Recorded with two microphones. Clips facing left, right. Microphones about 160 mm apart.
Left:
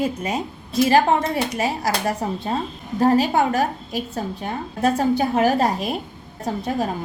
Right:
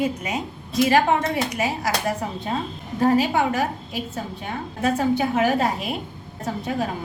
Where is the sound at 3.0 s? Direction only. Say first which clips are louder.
Left 2 dB; 40° left (ahead or behind).